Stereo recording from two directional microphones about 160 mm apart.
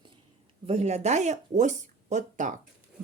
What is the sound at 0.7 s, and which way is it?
Speech, 45° right (ahead or behind).